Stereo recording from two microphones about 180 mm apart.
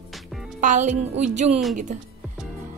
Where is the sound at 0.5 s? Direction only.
45° right (ahead or behind).